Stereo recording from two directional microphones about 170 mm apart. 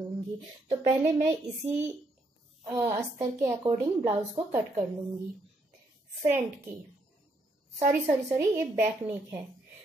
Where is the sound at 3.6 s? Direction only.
35° right (ahead or behind).